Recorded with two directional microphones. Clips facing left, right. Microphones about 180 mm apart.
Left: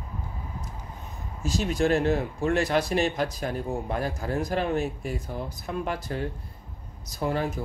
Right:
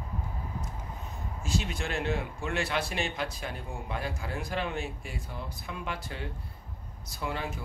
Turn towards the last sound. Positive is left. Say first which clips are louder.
# left 7 dB
turn(degrees=40)  # may be behind; listen again after turning